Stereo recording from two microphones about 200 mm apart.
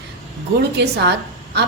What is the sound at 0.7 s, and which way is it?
Speech, 55° right (ahead or behind).